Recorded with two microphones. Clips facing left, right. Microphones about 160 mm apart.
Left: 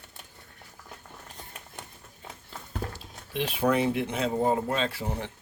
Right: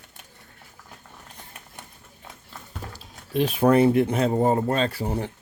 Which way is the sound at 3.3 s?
45° right (ahead or behind).